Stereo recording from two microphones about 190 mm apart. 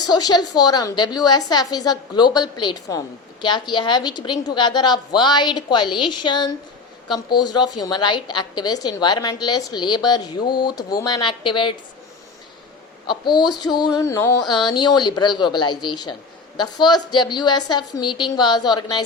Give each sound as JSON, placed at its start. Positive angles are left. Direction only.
{"t": 0.1, "sound": "a woman's voice", "side_deg": 20}
{"t": 13.1, "sound": "a woman's voice", "side_deg": 25}